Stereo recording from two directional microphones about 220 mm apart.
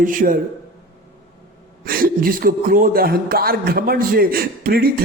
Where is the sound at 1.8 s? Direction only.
40° right (ahead or behind).